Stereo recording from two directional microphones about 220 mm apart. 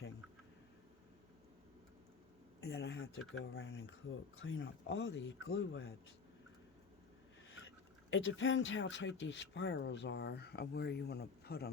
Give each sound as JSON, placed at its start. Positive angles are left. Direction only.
{"t": 2.6, "sound": "speech", "side_deg": 45}
{"t": 8.1, "sound": "speech", "side_deg": 60}